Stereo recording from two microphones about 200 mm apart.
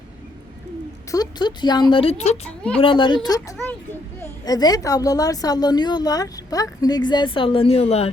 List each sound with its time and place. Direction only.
1.1 s speech: 20° left (ahead or behind)
4.2 s speech: 20° left (ahead or behind)